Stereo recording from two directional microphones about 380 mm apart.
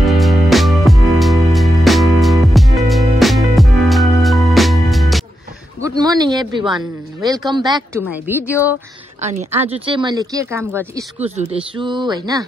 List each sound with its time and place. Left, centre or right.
0.0 s music: centre
5.8 s speech: centre
9.2 s speech: centre